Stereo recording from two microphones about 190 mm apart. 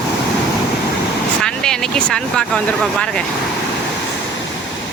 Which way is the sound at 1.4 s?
5° left (ahead or behind).